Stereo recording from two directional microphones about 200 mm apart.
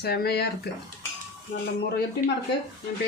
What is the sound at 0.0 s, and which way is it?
Speech, 50° left (ahead or behind).